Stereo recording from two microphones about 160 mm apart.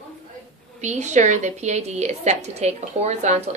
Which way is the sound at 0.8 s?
45° right (ahead or behind).